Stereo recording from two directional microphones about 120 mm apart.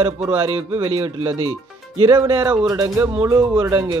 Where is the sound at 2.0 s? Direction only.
35° right (ahead or behind).